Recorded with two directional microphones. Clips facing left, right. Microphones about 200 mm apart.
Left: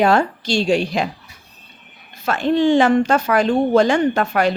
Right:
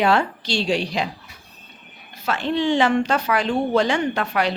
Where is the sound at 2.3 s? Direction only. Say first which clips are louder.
Left 5 dB; 45° left (ahead or behind).